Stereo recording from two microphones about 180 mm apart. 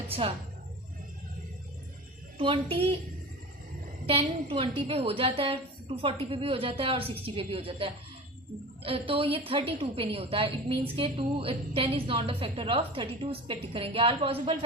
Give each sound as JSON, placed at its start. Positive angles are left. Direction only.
{"t": 0.1, "sound": "a woman's voice", "side_deg": -35}
{"t": 2.4, "sound": "a woman's voice", "side_deg": -30}
{"t": 4.0, "sound": "a woman's voice", "side_deg": -30}